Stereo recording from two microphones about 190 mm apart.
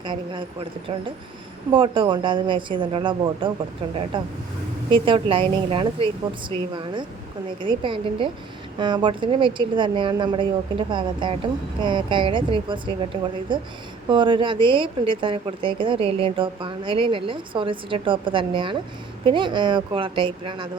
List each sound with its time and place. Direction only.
0.0 s a woman's voice: 25° right (ahead or behind)
4.9 s a woman's voice: 25° right (ahead or behind)